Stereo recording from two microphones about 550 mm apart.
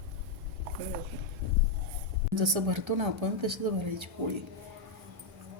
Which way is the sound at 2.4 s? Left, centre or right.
Right.